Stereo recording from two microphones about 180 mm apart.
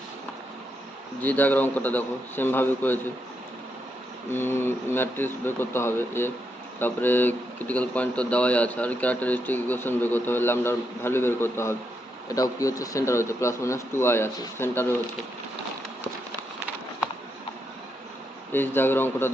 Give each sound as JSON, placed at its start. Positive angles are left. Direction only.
{"t": 1.2, "sound": "speech", "side_deg": 10}
{"t": 4.3, "sound": "speech", "side_deg": 10}
{"t": 18.5, "sound": "speech", "side_deg": 10}